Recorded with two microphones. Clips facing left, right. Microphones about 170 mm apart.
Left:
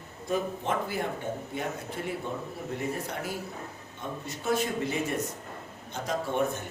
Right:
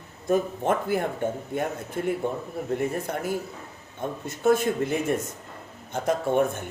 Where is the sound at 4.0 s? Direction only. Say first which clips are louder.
Right 9 dB; 50° right (ahead or behind).